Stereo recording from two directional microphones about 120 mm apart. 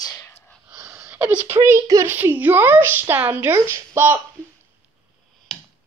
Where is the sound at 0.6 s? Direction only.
30° right (ahead or behind).